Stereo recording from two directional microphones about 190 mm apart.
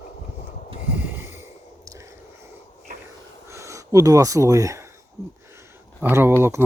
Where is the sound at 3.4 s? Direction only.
15° right (ahead or behind).